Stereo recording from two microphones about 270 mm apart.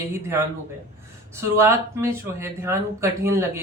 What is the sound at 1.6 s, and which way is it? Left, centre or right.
Speech, centre.